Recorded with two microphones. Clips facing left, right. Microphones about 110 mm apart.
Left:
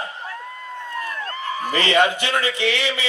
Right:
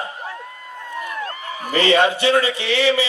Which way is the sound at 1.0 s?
15° right (ahead or behind).